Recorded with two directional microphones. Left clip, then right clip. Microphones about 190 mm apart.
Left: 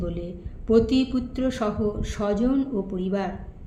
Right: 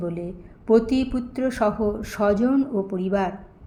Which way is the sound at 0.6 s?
20° right (ahead or behind).